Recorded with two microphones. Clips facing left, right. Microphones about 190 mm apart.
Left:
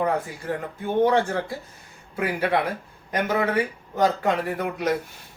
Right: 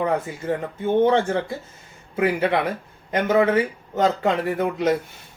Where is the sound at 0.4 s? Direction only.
25° right (ahead or behind).